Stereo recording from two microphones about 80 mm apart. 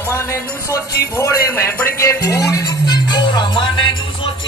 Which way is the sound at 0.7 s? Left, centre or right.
Left.